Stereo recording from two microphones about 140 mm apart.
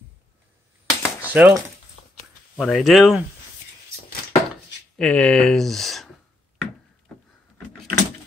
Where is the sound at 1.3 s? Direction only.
10° right (ahead or behind).